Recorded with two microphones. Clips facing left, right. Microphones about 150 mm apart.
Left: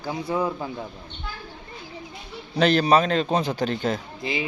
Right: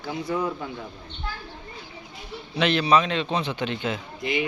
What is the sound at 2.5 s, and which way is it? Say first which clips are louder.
A man's voice: left 2 dB; 40° left (ahead or behind).